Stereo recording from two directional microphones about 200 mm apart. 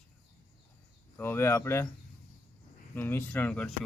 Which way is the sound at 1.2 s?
10° left (ahead or behind).